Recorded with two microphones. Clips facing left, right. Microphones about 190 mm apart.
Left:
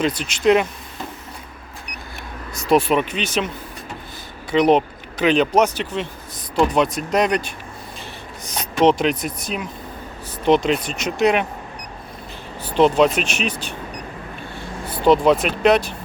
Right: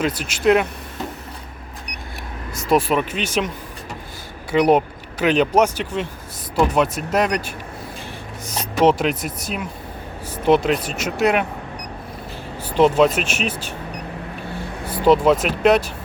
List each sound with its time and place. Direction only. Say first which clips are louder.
0.0 s speech: left 1 dB; 5° right (ahead or behind)
2.6 s speech: left 1 dB; centre (ahead or behind)
4.5 s speech: even; 10° right (ahead or behind)
12.6 s speech: even; 10° right (ahead or behind)
14.8 s speech: even; 10° right (ahead or behind)